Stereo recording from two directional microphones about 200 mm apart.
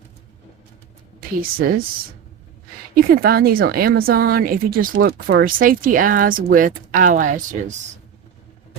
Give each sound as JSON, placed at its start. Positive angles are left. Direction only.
{"t": 1.4, "sound": "a woman's voice", "side_deg": -45}
{"t": 2.9, "sound": "a woman's voice", "side_deg": -50}